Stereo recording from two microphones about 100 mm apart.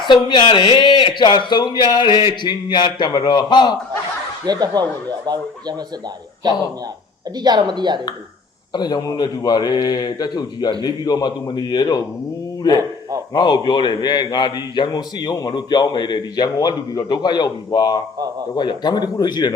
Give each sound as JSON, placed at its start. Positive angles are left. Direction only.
{"t": 0.0, "sound": "a man's voice", "side_deg": 50}
{"t": 4.4, "sound": "speech", "side_deg": -40}
{"t": 7.3, "sound": "speech", "side_deg": -45}
{"t": 8.7, "sound": "a man's voice", "side_deg": 45}